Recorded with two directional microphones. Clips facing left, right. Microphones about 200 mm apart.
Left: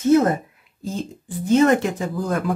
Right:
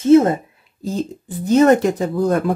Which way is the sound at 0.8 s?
40° right (ahead or behind).